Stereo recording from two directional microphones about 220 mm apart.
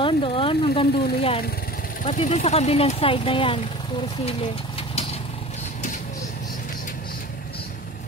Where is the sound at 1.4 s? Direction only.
45° left (ahead or behind).